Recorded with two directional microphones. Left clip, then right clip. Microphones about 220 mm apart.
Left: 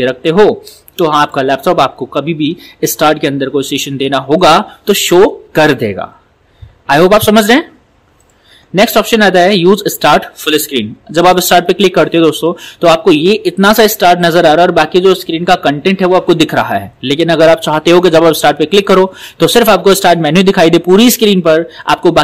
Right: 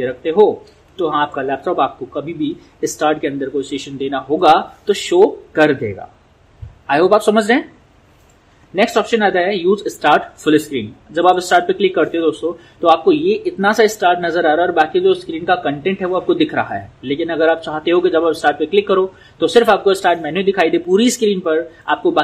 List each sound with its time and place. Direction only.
0.0 s speech: 50° left (ahead or behind)
8.7 s speech: 50° left (ahead or behind)